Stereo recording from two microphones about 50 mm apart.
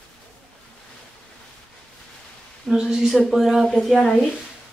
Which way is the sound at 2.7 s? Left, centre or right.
Centre.